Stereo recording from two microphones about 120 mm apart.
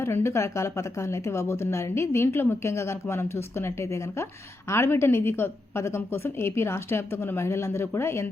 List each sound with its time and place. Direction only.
0.0 s a woman's voice: 20° left (ahead or behind)